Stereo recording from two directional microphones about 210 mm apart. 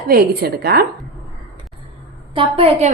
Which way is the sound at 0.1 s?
45° right (ahead or behind).